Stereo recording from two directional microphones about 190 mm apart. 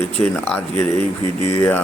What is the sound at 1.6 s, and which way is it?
Speech, 10° left (ahead or behind).